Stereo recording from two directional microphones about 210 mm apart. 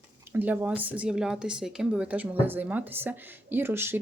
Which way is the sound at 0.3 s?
10° right (ahead or behind).